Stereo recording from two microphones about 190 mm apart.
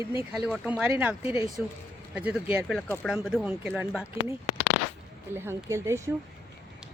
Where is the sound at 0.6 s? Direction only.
5° right (ahead or behind); by 3.1 s 10° left (ahead or behind).